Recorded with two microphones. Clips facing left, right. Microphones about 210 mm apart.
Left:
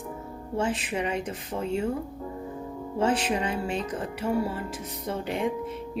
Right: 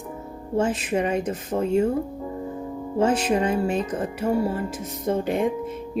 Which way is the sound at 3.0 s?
45° right (ahead or behind).